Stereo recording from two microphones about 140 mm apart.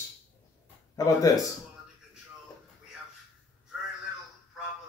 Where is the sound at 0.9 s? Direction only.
25° left (ahead or behind).